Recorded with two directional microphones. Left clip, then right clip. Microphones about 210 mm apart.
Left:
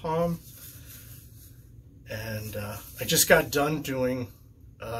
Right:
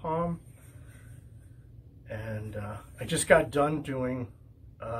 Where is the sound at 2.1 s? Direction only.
25° left (ahead or behind).